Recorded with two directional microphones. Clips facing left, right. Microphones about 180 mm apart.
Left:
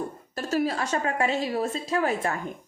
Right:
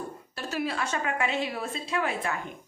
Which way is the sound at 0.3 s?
40° left (ahead or behind).